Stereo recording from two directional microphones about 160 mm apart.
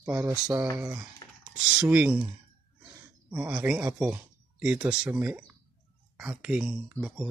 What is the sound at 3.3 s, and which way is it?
Speech, 5° right (ahead or behind).